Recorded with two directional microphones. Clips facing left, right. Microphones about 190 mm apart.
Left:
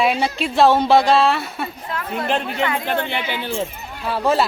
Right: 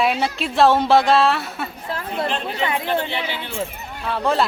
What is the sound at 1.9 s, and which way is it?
Speech, 30° right (ahead or behind).